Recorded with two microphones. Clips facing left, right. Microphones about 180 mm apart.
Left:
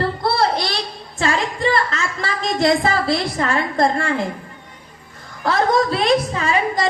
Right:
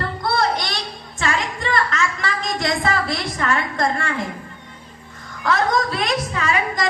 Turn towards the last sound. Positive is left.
turn(degrees=30)  # may be behind; listen again after turning